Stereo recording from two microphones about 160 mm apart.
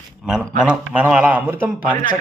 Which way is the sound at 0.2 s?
5° right (ahead or behind).